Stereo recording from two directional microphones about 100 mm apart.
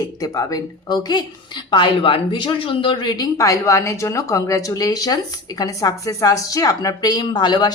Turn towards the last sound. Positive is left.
turn(degrees=45)  # may be behind; listen again after turning